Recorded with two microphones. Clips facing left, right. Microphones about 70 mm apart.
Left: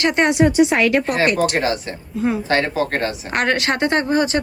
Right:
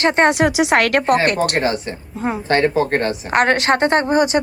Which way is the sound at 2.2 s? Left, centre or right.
Right.